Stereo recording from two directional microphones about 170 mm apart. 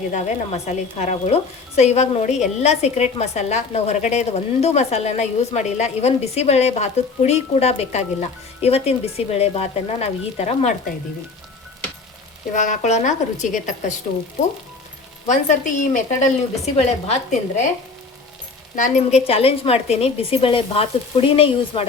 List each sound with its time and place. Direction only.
0.1 s a woman's voice: 45° left (ahead or behind)
12.5 s speech: 45° left (ahead or behind)
15.3 s speech: 45° left (ahead or behind)
18.8 s a woman's voice: 45° left (ahead or behind)